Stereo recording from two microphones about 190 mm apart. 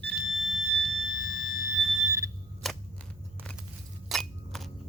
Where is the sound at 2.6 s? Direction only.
Centre (ahead or behind).